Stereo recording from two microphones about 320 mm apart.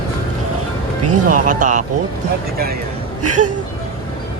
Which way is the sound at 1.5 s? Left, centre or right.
Right.